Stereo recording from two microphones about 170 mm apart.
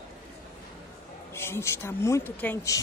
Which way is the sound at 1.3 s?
15° left (ahead or behind).